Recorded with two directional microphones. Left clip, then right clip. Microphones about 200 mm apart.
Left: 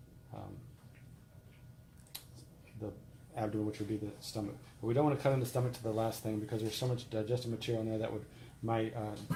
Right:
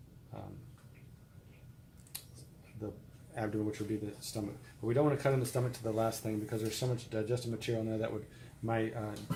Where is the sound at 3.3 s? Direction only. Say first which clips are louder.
Even; 5° left (ahead or behind).